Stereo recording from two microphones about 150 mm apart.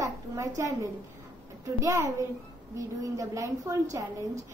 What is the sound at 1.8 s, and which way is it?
A woman's voice, 20° right (ahead or behind).